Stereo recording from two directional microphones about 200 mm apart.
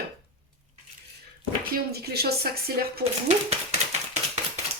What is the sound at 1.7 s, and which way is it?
Speech, 50° right (ahead or behind).